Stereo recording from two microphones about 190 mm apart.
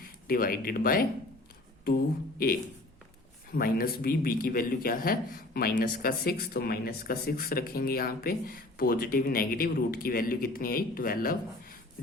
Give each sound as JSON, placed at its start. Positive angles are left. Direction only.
{"t": 0.3, "sound": "speech", "side_deg": 50}
{"t": 3.5, "sound": "speech", "side_deg": 50}